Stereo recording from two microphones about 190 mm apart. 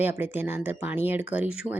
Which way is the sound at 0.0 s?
10° right (ahead or behind).